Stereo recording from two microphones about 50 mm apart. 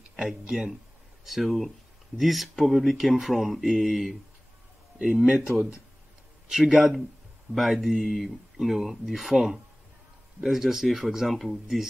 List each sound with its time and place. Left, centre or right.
0.3 s speech: centre
4.9 s speech: centre
6.5 s speech: centre